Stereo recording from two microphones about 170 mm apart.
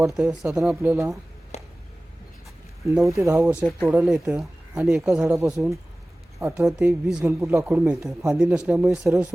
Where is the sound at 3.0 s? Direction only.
15° right (ahead or behind).